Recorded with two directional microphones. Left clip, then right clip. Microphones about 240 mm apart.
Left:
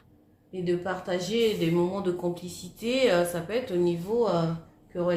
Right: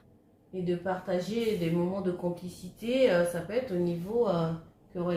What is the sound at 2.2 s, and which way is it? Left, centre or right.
Speech, left.